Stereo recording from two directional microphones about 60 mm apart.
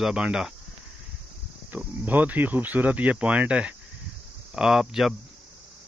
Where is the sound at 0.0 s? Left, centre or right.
Centre.